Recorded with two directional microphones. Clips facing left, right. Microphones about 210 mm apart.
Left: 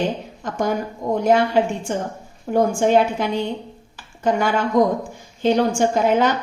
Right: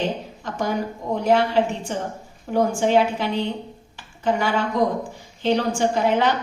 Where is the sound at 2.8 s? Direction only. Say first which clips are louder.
Left 2 dB; 45° left (ahead or behind).